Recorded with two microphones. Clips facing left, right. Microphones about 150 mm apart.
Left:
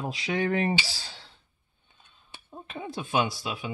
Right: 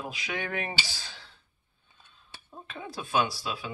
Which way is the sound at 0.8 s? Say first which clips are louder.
Left 2 dB; 30° left (ahead or behind).